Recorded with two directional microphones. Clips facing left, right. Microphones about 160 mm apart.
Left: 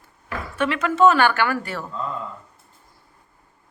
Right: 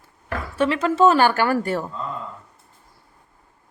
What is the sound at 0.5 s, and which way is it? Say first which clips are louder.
Speech: right 1 dB; 35° right (ahead or behind).